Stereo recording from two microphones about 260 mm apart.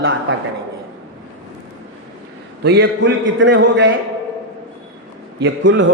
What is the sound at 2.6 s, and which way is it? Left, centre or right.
A man's voice, right.